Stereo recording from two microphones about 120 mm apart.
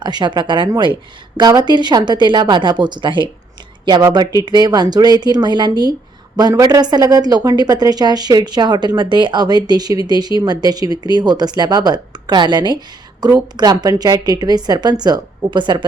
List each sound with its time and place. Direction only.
0.0 s a woman's voice: 40° right (ahead or behind)